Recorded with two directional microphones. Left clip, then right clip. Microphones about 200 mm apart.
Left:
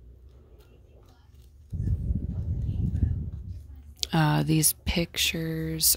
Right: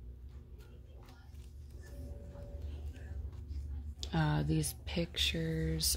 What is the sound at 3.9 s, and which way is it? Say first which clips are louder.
Speech: left 10 dB; 40° left (ahead or behind).